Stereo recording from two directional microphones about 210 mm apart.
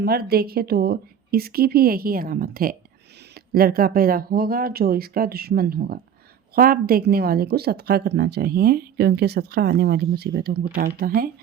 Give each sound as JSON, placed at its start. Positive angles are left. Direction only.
{"t": 0.0, "sound": "speech", "side_deg": -50}